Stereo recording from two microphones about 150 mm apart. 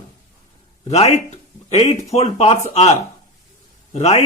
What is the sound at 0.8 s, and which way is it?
A man's voice, 45° left (ahead or behind).